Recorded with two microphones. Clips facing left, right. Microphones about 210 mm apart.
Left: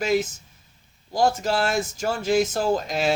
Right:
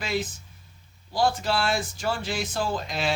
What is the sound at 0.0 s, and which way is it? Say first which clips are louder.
Speech: left 7 dB; 45° left (ahead or behind).